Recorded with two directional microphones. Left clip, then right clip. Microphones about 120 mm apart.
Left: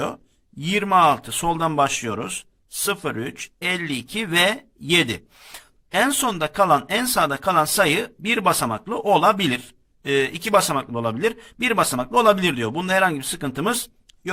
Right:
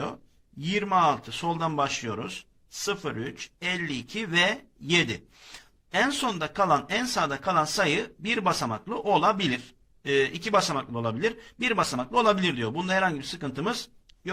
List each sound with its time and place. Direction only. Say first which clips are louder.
0.6 s speech: left 7 dB; 40° left (ahead or behind)